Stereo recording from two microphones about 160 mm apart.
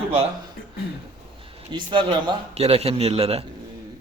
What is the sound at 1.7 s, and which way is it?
A man's voice, 30° right (ahead or behind).